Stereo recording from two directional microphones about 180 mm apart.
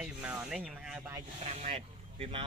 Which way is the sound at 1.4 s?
35° right (ahead or behind).